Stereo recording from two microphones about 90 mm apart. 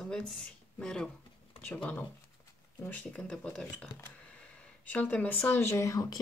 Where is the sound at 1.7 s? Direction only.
20° left (ahead or behind).